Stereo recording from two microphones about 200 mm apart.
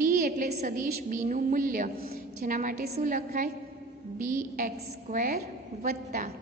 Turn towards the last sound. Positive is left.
turn(degrees=-45)  # may be behind; listen again after turning